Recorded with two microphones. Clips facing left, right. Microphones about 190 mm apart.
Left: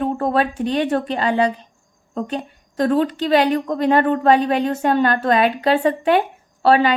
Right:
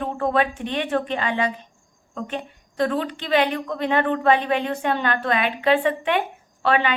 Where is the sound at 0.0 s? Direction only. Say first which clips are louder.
Left 3 dB; 40° left (ahead or behind).